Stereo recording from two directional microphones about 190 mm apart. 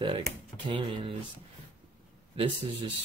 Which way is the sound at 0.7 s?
25° right (ahead or behind).